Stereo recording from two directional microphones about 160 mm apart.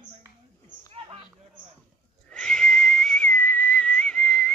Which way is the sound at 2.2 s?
5° left (ahead or behind).